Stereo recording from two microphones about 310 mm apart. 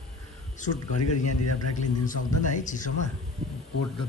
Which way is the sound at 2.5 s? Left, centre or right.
Left.